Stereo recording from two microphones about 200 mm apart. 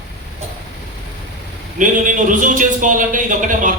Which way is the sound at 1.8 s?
40° right (ahead or behind).